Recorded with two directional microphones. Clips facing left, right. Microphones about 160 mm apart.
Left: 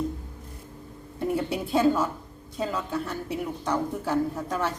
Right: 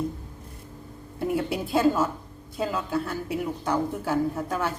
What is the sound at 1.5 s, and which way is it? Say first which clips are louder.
A woman's voice: even; 5° right (ahead or behind).